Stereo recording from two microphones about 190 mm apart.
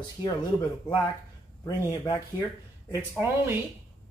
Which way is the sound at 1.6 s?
15° left (ahead or behind).